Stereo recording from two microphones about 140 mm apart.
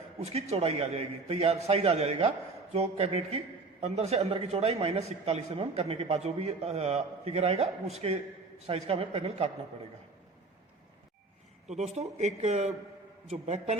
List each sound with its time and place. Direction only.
0.2 s a man's voice: 50° right (ahead or behind)
11.7 s a man's voice: 55° right (ahead or behind)